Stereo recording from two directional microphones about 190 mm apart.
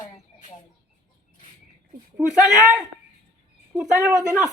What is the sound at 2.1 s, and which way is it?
Speech, 5° right (ahead or behind).